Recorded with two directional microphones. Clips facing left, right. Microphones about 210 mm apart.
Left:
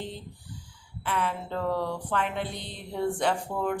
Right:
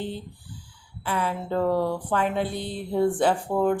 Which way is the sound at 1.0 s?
35° right (ahead or behind).